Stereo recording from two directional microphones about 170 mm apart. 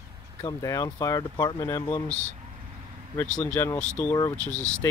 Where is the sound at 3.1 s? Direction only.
10° left (ahead or behind).